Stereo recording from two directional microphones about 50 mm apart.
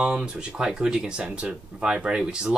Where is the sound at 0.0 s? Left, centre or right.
Centre.